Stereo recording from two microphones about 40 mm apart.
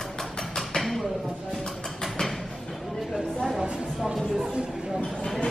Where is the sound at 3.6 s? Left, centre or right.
Centre.